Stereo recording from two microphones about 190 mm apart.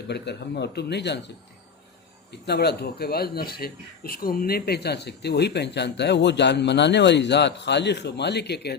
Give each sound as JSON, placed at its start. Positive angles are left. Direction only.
{"t": 0.1, "sound": "a man's voice", "side_deg": 60}
{"t": 2.3, "sound": "a man's voice", "side_deg": 60}